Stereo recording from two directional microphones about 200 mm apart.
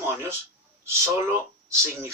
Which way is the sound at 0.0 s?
10° right (ahead or behind).